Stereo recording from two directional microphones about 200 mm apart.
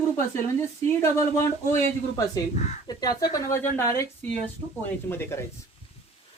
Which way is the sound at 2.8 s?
20° left (ahead or behind).